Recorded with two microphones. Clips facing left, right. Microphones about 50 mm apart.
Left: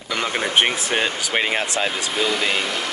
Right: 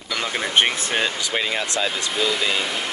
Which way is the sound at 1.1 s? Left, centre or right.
Left.